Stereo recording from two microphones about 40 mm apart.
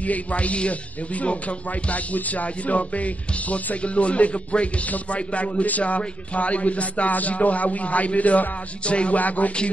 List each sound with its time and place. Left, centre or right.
0.0 s music: left
9.2 s music: left